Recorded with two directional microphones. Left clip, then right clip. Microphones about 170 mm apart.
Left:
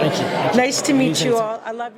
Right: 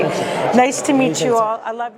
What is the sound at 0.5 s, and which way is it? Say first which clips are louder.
A woman's voice: right 5 dB; 15° right (ahead or behind).